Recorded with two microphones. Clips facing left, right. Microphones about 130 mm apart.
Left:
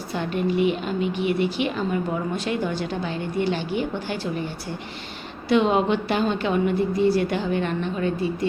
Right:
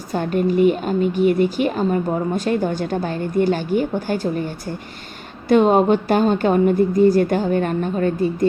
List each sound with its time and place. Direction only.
0.1 s speech: 45° right (ahead or behind)
5.5 s speech: 45° right (ahead or behind)